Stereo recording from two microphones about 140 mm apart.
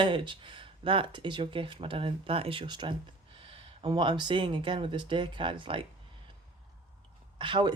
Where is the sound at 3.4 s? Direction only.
40° right (ahead or behind).